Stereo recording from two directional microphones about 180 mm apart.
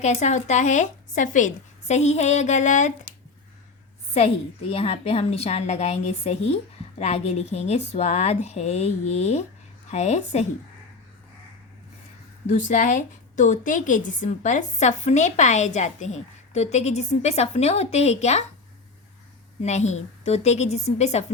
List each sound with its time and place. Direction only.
0.0 s a woman's voice: 40° left (ahead or behind)
4.7 s a woman's voice: 35° left (ahead or behind)
12.5 s a woman's voice: 45° left (ahead or behind)
19.6 s a woman's voice: 40° left (ahead or behind)